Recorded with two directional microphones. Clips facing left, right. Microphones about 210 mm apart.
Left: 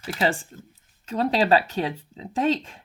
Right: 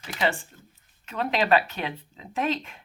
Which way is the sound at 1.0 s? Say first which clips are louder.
Left 3 dB; 35° left (ahead or behind).